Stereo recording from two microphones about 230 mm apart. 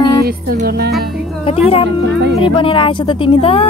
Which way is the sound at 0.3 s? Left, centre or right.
Right.